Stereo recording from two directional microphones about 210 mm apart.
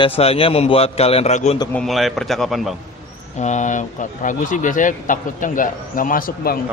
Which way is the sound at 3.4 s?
35° left (ahead or behind).